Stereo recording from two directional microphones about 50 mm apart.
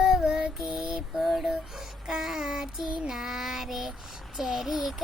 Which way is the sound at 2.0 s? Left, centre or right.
Centre.